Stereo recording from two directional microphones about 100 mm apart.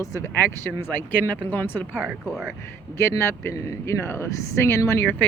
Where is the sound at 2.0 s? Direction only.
5° right (ahead or behind).